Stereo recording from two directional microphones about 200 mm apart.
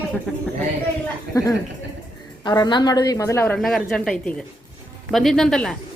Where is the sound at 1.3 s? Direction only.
15° left (ahead or behind).